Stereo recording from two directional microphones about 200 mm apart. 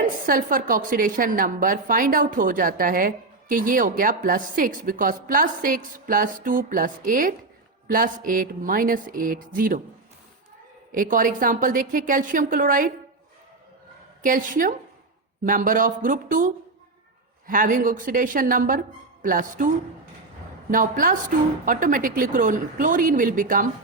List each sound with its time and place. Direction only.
0.0 s a woman's voice: 45° right (ahead or behind)
10.9 s a woman's voice: 40° right (ahead or behind)
14.2 s a woman's voice: 45° right (ahead or behind)
20.7 s a woman's voice: 45° right (ahead or behind)